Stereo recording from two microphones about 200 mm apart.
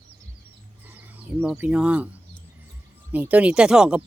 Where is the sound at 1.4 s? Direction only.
10° right (ahead or behind).